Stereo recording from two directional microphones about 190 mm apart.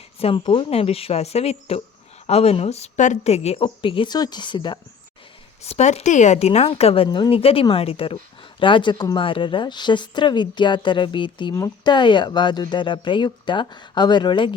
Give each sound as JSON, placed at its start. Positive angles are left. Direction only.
{"t": 0.2, "sound": "speech", "side_deg": 30}
{"t": 5.6, "sound": "speech", "side_deg": 35}